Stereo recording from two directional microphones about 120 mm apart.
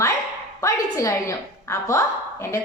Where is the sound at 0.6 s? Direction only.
25° left (ahead or behind).